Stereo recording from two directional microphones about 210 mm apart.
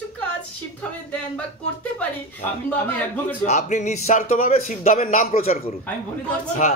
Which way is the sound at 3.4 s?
35° left (ahead or behind).